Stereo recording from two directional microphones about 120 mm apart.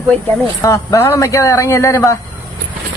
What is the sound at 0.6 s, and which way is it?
A man's voice, 25° left (ahead or behind).